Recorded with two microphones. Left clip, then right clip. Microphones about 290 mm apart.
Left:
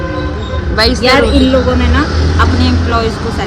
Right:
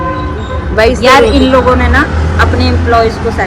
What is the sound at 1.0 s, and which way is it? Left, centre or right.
Speech, right.